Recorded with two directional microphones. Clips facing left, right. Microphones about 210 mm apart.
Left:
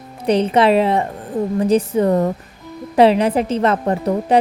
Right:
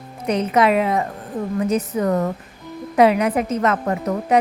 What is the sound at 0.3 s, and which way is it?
A woman's voice, 30° left (ahead or behind).